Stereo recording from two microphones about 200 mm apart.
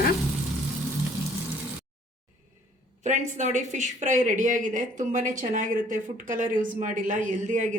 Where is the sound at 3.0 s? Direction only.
35° right (ahead or behind).